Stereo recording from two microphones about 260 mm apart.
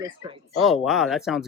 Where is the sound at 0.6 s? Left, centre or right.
Centre.